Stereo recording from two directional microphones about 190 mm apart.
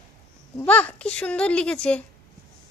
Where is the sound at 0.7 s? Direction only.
10° left (ahead or behind).